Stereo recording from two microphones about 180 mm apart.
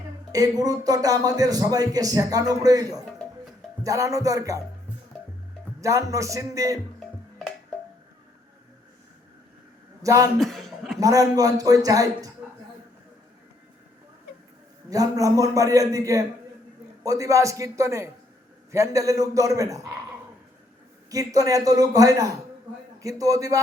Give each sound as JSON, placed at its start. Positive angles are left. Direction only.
{"t": 0.3, "sound": "a man's voice", "side_deg": -20}
{"t": 5.8, "sound": "a man's voice", "side_deg": -20}
{"t": 10.0, "sound": "a man's voice", "side_deg": -20}
{"t": 10.4, "sound": "a sound", "side_deg": 0}
{"t": 11.0, "sound": "a man's voice", "side_deg": -20}
{"t": 14.8, "sound": "a man's voice", "side_deg": -20}
{"t": 21.1, "sound": "a man's voice", "side_deg": -20}